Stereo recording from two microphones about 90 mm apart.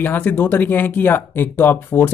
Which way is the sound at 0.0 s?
20° left (ahead or behind).